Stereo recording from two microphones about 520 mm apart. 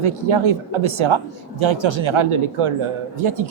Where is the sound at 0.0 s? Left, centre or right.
Right.